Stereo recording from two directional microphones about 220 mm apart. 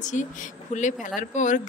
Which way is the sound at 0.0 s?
35° left (ahead or behind).